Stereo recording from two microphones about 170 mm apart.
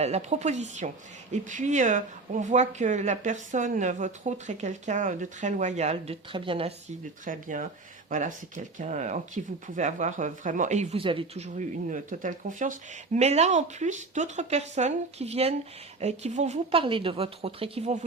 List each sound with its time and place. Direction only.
0.0 s a woman's voice: 40° right (ahead or behind)
7.3 s a woman's voice: 50° right (ahead or behind)